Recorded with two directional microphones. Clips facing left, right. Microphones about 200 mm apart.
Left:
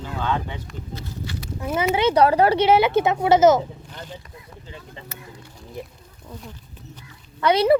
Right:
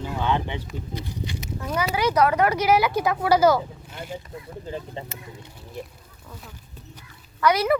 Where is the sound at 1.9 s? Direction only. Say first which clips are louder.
Left 4 dB; 30° left (ahead or behind).